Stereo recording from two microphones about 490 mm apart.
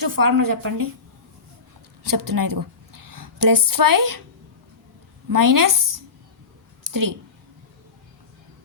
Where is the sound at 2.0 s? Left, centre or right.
Right.